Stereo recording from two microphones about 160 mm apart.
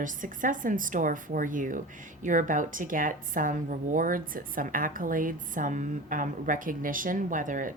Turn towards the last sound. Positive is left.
turn(degrees=-55)  # may be behind; listen again after turning